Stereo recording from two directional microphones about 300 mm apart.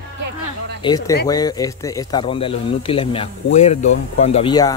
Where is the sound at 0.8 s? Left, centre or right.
Centre.